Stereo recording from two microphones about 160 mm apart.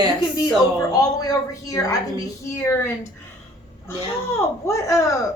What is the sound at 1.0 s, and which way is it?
Speech, 20° left (ahead or behind).